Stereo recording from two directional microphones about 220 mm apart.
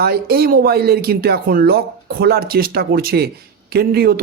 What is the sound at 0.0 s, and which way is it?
Speech, 45° right (ahead or behind).